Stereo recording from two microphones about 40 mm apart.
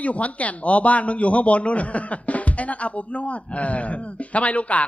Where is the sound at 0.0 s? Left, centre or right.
Left.